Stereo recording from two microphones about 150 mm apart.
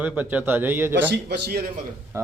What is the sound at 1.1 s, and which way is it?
Speech, 90° right.